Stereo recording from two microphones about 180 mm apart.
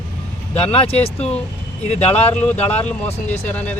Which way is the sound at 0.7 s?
30° left (ahead or behind).